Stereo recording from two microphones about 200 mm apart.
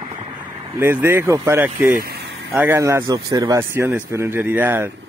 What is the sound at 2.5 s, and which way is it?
A man's voice, 10° right (ahead or behind).